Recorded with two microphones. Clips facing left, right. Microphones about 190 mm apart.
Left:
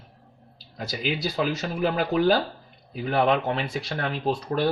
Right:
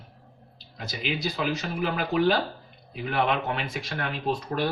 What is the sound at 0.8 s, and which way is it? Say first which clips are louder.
Speech: left 2 dB; 35° left (ahead or behind).